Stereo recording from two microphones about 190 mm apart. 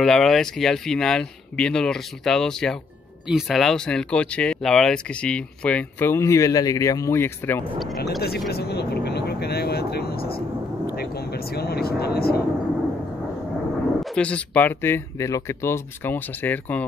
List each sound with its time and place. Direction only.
0.0 s speech: centre (ahead or behind)
8.2 s vehicle: 55° left (ahead or behind)
11.5 s vehicle: 55° left (ahead or behind)
14.1 s speech: 5° left (ahead or behind)